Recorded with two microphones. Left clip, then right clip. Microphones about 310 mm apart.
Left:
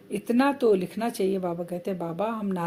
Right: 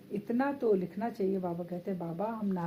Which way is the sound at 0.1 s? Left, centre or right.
Left.